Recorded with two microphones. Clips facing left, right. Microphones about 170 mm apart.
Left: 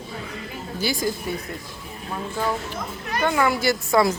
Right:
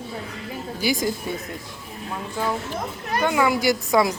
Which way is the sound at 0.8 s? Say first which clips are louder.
Right 2 dB; 15° right (ahead or behind).